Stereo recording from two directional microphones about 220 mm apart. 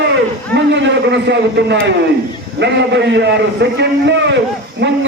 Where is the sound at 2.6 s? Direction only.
50° right (ahead or behind).